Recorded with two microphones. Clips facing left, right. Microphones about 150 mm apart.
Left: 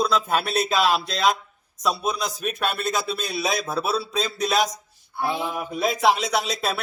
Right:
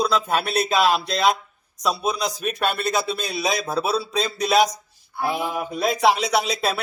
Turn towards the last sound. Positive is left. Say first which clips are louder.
# right 3 dB
turn(degrees=0)  # may be behind; listen again after turning